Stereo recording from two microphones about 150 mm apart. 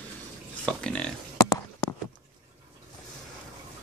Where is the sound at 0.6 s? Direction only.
5° left (ahead or behind).